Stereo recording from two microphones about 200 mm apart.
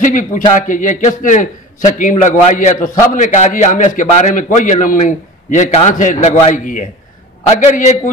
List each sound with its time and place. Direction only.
0.0 s a man's voice: 40° left (ahead or behind)